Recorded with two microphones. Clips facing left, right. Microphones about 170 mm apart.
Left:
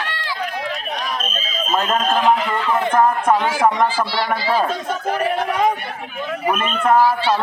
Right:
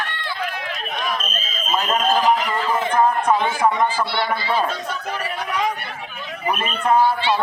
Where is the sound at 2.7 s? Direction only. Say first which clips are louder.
Left 2 dB; 65° left (ahead or behind); by 4.0 s 90° left.